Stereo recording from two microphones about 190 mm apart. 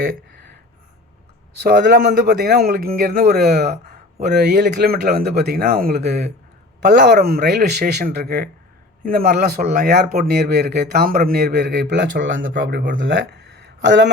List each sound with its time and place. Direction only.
1.6 s speech: 60° right (ahead or behind)
6.8 s speech: 65° right (ahead or behind)